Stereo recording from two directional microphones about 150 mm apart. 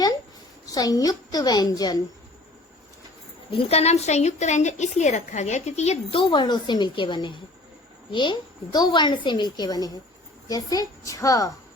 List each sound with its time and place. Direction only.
0.6 s a woman's voice: 25° left (ahead or behind)
3.7 s a woman's voice: 45° left (ahead or behind); by 11.5 s 20° left (ahead or behind)